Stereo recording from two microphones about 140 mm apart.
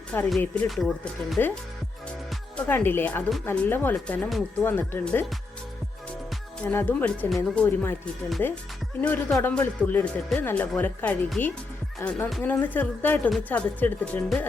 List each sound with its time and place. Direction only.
0.3 s speech: 5° left (ahead or behind)
2.6 s speech: 15° left (ahead or behind)
6.7 s speech: 15° left (ahead or behind)